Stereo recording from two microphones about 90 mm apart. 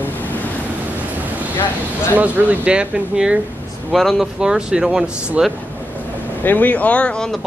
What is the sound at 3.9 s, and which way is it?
Speech, centre (ahead or behind).